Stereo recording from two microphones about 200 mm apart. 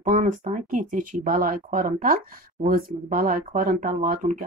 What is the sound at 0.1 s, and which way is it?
Speech, 40° right (ahead or behind).